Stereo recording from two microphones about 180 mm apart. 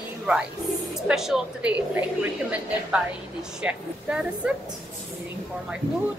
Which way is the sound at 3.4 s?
5° right (ahead or behind).